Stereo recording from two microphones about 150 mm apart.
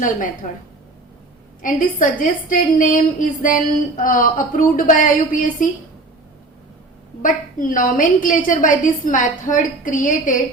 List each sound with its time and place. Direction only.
1.6 s a woman's voice: 65° left (ahead or behind)
7.2 s a woman's voice: 60° left (ahead or behind)